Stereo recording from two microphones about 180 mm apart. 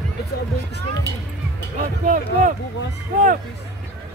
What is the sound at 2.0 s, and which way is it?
Speech, 45° right (ahead or behind).